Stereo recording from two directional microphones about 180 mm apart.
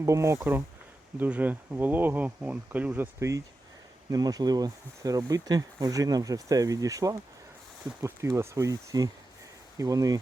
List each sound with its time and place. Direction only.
0.0 s speech: 15° right (ahead or behind)